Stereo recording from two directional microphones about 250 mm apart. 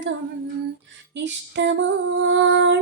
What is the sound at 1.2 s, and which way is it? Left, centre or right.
Female singing, right.